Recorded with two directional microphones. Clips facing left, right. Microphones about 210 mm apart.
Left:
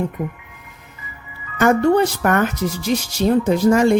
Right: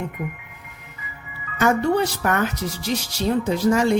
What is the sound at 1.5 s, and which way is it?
A woman's voice, 50° left (ahead or behind).